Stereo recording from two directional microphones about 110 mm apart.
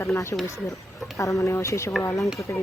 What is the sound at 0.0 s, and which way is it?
Speech, 25° left (ahead or behind).